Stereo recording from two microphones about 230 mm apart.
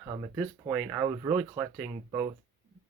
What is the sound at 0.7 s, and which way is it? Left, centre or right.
Speech, centre.